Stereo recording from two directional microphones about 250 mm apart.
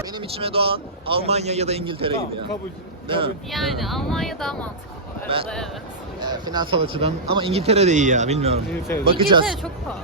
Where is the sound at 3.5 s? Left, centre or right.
Centre.